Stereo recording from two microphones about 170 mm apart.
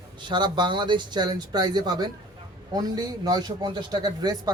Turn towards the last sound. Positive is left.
turn(degrees=-25)  # may be behind; listen again after turning